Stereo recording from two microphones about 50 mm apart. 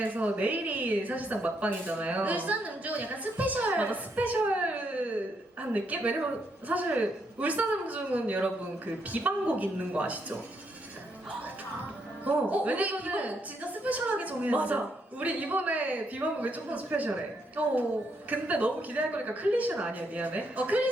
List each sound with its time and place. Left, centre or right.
0.0 s a woman's voice: right
5.7 s a woman's voice: right
12.2 s a woman's voice: right